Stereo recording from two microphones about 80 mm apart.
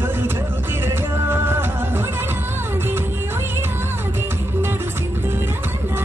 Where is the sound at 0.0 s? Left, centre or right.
Right.